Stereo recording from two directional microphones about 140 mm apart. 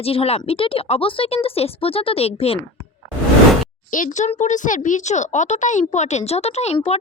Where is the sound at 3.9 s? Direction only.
70° left (ahead or behind).